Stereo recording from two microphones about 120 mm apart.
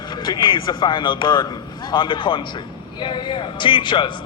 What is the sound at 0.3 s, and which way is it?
A man's voice, 40° left (ahead or behind).